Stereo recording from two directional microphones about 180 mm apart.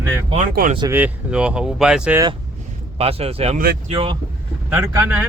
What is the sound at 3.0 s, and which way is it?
Speech, 35° right (ahead or behind).